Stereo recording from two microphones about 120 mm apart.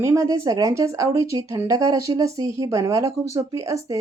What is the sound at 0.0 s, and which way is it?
Speech, 25° right (ahead or behind).